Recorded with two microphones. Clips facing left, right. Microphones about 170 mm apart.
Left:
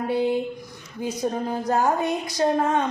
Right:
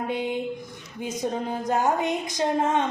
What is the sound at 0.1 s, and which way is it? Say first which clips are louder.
A woman's voice: left 8 dB; 20° right (ahead or behind).